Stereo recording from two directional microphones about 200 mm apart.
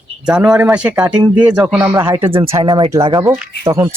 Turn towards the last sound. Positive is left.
turn(degrees=-15)  # may be behind; listen again after turning